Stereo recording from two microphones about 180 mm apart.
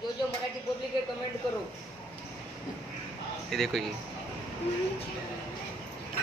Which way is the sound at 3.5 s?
Centre (ahead or behind).